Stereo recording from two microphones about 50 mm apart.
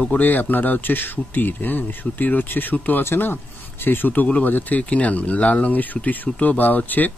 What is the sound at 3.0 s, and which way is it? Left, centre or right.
Speech, left.